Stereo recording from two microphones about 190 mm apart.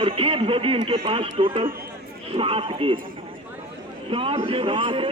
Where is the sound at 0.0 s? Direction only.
30° right (ahead or behind).